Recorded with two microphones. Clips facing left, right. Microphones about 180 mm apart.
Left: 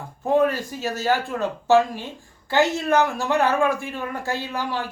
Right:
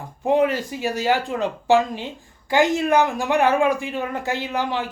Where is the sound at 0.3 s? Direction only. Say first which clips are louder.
Right 1 dB; 20° right (ahead or behind).